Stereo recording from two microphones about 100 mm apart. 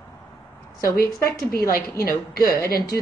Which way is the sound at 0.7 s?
35° left (ahead or behind).